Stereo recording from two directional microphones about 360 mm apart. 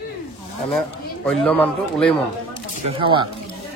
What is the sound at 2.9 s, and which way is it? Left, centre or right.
Speech, centre.